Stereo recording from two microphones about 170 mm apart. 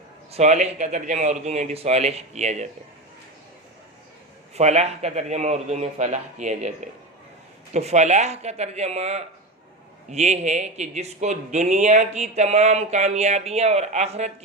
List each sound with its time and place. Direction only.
0.3 s speech: 40° right (ahead or behind)
4.5 s speech: 40° right (ahead or behind)
7.7 s speech: 40° right (ahead or behind)